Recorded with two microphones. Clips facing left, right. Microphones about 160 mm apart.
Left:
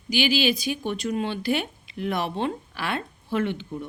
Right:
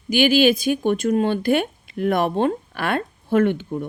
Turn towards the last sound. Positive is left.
turn(degrees=-50)  # may be behind; listen again after turning